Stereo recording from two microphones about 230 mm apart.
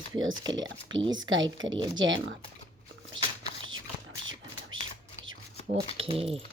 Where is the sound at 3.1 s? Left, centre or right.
Right.